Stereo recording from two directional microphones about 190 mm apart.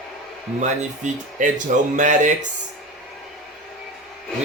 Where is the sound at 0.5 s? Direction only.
40° right (ahead or behind).